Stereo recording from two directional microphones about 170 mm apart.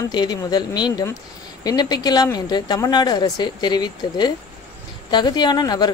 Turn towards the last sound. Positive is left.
turn(degrees=25)  # may be behind; listen again after turning